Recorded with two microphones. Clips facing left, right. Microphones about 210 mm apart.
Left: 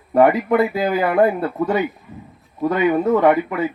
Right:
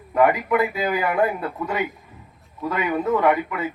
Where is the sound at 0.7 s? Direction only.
40° left (ahead or behind).